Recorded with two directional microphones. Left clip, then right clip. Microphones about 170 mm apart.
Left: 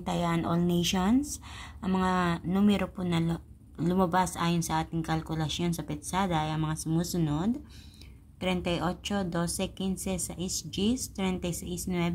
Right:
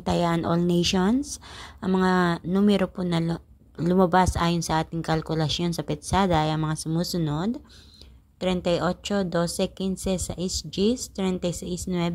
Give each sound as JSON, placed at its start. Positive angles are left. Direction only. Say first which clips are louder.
{"t": 0.0, "sound": "a woman's voice", "louder": "right 6 dB", "side_deg": -30}